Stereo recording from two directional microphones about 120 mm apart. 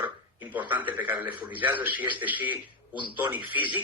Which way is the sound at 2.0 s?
15° right (ahead or behind).